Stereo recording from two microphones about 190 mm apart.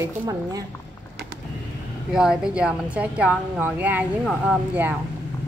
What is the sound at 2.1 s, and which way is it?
A woman's voice, 5° right (ahead or behind).